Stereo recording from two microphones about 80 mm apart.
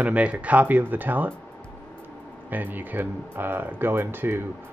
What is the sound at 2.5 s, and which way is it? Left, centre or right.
Speech, right.